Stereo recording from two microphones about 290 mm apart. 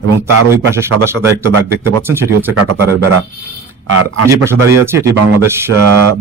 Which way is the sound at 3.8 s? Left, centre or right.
Right.